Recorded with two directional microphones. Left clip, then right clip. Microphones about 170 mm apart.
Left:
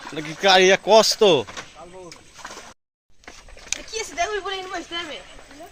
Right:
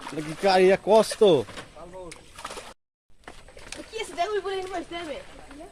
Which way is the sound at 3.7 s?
20° right (ahead or behind).